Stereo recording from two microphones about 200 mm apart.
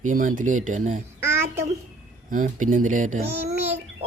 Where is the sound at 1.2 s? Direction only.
10° right (ahead or behind).